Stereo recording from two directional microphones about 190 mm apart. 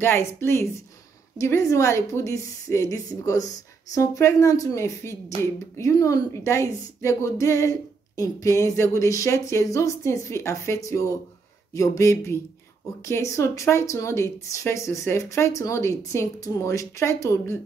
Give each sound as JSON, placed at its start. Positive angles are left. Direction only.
{"t": 0.0, "sound": "a woman's voice", "side_deg": 15}